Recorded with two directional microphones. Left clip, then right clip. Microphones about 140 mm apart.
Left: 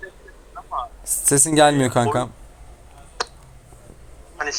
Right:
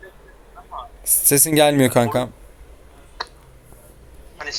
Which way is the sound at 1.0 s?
15° right (ahead or behind).